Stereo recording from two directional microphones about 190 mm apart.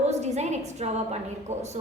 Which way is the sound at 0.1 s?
35° right (ahead or behind).